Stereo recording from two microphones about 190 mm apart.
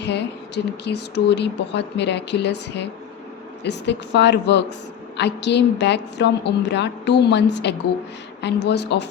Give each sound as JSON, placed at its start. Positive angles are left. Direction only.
{"t": 0.0, "sound": "speech", "side_deg": 65}